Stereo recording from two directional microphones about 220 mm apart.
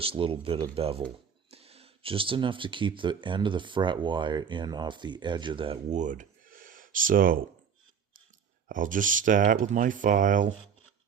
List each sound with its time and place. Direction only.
0.0 s speech: 25° right (ahead or behind); by 7.4 s 40° right (ahead or behind)
8.7 s speech: 35° right (ahead or behind)